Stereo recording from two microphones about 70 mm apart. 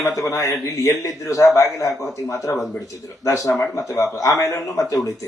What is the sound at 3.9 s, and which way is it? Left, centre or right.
Speech, left.